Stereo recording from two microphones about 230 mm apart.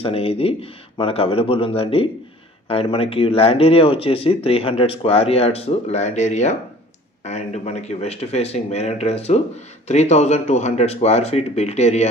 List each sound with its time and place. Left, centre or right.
0.0 s speech: left